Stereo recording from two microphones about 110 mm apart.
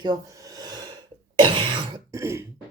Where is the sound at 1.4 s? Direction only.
50° right (ahead or behind).